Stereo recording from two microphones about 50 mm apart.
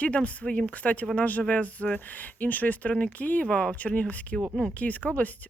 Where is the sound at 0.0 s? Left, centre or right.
Left.